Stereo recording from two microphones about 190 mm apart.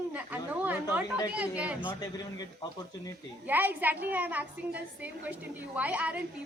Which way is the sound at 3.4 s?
10° right (ahead or behind).